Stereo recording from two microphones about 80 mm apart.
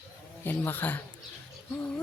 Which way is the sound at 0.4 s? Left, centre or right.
Left.